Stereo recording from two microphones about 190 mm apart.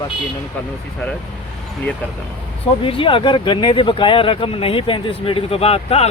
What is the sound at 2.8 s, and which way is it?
Speech, 30° left (ahead or behind).